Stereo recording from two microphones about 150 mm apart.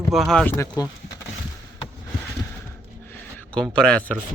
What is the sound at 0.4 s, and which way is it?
Speech, 20° left (ahead or behind).